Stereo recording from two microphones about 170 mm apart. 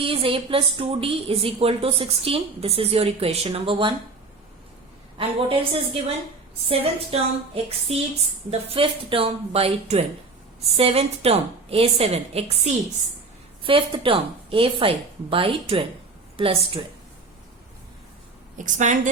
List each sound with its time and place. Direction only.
0.0 s a woman's voice: 35° right (ahead or behind)
5.1 s a woman's voice: 30° right (ahead or behind)
13.7 s a woman's voice: 30° right (ahead or behind)
18.5 s a woman's voice: 45° right (ahead or behind)